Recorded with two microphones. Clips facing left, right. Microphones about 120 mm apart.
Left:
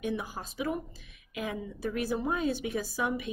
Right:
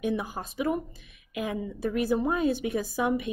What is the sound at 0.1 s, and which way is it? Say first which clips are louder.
Speech: right 4 dB; 55° right (ahead or behind).